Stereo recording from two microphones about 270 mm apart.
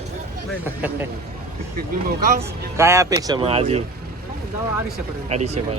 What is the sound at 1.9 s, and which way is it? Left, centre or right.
Speech, right.